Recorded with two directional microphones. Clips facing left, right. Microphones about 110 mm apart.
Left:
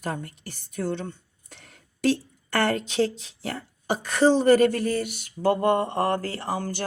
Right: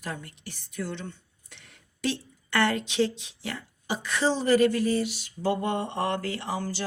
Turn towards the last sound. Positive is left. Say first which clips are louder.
# left 2 dB
turn(degrees=50)  # may be behind; listen again after turning